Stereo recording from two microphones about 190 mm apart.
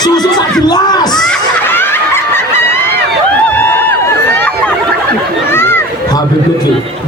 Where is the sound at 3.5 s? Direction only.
10° left (ahead or behind).